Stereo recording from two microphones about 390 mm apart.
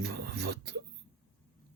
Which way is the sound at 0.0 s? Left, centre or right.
Right.